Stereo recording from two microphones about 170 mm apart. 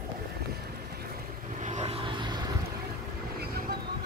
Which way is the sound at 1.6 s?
40° right (ahead or behind).